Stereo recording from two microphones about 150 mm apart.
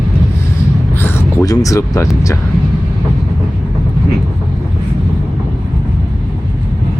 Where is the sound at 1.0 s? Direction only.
15° left (ahead or behind).